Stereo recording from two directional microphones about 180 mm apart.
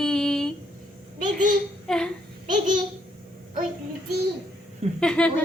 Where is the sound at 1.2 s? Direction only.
45° right (ahead or behind).